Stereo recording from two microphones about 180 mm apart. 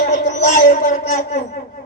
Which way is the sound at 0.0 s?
45° left (ahead or behind).